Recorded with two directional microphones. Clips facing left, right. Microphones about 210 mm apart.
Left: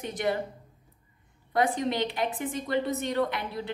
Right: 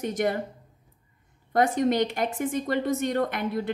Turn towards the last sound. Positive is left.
turn(degrees=-50)  # may be behind; listen again after turning